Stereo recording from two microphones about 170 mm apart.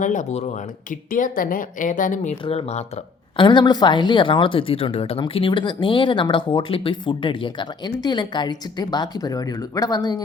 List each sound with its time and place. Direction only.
0.0 s speech: 50° left (ahead or behind); by 10.2 s 25° left (ahead or behind)